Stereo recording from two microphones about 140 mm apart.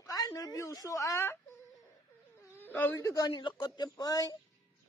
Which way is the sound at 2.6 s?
15° left (ahead or behind).